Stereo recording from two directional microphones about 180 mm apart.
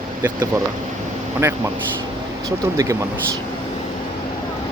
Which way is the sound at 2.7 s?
20° right (ahead or behind).